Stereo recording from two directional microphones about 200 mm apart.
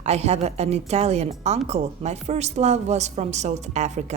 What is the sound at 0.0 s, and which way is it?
A woman's voice, 30° right (ahead or behind).